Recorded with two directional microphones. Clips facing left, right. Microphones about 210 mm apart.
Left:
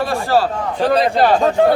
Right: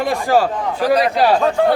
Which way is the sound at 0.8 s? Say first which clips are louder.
Left 1 dB; 30° left (ahead or behind).